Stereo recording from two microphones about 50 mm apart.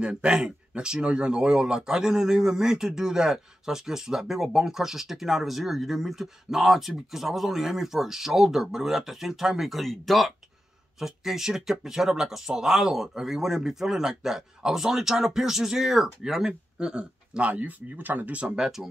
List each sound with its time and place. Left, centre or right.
0.0 s speech: centre
18.6 s speech: centre